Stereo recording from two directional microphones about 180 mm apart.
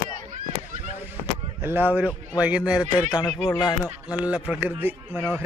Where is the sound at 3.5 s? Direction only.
25° left (ahead or behind).